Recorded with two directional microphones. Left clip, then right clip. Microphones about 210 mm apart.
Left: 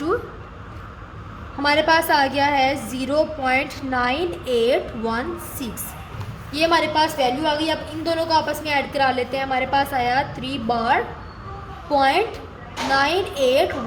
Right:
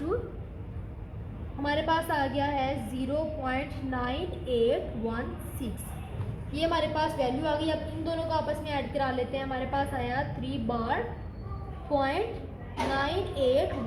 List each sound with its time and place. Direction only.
1.6 s a woman's voice: 35° left (ahead or behind)
11.9 s a woman's voice: 35° left (ahead or behind)